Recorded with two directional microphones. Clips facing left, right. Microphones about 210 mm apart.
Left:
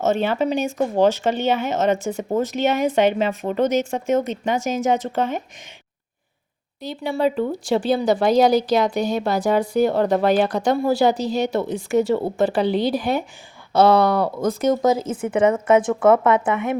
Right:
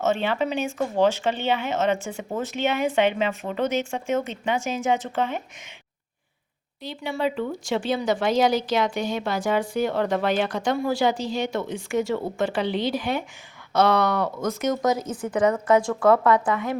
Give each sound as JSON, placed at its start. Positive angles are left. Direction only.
{"t": 0.0, "sound": "a woman's voice", "side_deg": 40}
{"t": 6.8, "sound": "a woman's voice", "side_deg": 40}